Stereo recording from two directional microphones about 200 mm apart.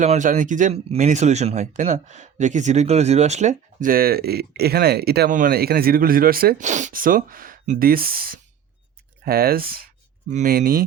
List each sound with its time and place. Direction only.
0.0 s speech: 35° right (ahead or behind)